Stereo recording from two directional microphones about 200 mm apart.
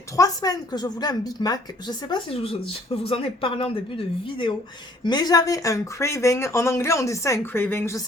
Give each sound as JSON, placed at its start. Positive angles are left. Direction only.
{"t": 0.2, "sound": "a woman's voice", "side_deg": 20}